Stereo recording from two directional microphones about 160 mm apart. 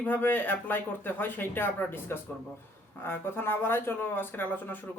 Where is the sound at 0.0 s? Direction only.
10° left (ahead or behind).